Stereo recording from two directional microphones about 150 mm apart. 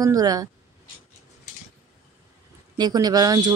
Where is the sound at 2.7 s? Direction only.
25° right (ahead or behind).